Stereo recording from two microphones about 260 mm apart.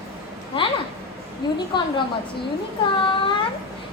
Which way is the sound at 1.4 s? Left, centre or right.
Centre.